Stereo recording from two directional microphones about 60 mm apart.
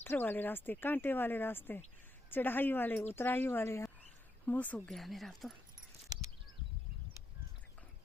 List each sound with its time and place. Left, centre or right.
0.0 s speech: left
4.4 s speech: left
4.9 s speech: centre